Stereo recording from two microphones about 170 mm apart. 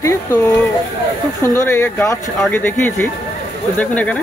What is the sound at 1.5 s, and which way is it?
Speech, 15° left (ahead or behind).